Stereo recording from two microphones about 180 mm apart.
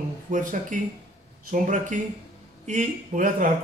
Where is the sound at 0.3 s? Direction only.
45° right (ahead or behind).